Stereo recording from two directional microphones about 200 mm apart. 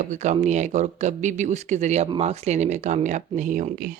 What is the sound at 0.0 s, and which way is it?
Speech, 35° right (ahead or behind).